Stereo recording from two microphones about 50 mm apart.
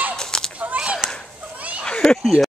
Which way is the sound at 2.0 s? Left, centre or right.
Centre.